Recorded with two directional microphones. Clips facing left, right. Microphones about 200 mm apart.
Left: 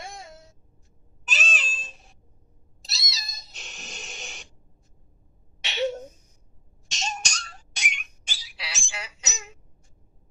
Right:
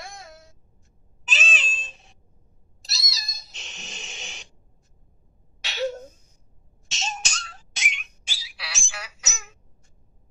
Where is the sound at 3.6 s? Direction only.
Centre (ahead or behind).